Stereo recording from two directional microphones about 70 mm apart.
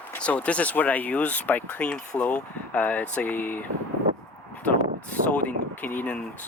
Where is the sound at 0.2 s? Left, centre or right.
Centre.